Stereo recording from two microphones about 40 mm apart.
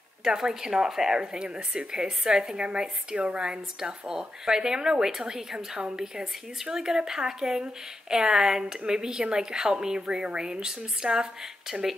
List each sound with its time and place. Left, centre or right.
0.2 s a woman's voice: centre; by 3.4 s right
3.4 s a woman's voice: centre